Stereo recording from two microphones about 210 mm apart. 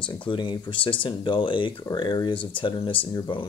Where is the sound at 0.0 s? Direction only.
20° left (ahead or behind).